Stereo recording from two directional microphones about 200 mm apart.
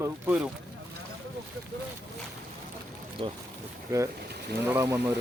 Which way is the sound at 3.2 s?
25° right (ahead or behind).